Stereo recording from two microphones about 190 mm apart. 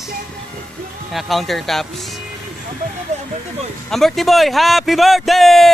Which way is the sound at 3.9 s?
Centre (ahead or behind).